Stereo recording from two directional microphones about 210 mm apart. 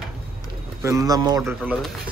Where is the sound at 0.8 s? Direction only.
15° right (ahead or behind).